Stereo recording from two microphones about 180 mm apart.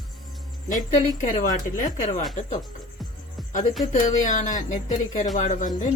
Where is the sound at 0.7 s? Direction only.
45° left (ahead or behind).